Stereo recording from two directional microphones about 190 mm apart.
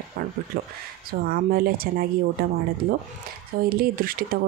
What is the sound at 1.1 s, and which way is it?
Speech, 50° right (ahead or behind).